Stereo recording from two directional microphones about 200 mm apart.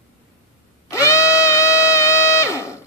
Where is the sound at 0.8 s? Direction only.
15° left (ahead or behind).